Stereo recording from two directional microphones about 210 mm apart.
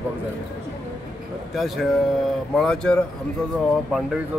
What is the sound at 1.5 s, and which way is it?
Speech, centre (ahead or behind).